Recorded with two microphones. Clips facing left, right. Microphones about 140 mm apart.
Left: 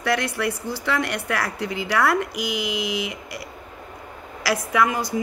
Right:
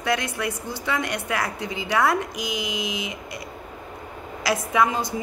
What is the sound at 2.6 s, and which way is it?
Mantra, 65° left (ahead or behind).